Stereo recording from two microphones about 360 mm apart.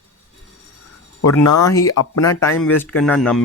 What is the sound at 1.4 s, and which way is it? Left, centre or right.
Speech, left.